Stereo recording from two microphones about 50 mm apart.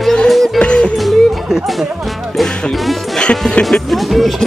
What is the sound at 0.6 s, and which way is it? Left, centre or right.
Music, centre.